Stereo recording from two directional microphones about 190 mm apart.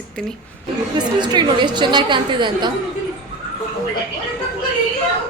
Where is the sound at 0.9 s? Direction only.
20° right (ahead or behind).